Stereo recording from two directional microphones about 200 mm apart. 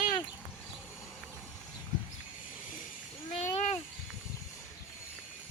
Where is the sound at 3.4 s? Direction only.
35° left (ahead or behind).